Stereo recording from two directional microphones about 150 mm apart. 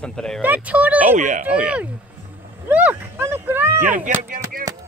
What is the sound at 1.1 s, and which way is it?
Speech, 55° right (ahead or behind).